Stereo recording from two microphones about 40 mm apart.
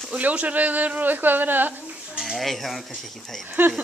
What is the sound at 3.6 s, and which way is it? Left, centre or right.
Speech, right.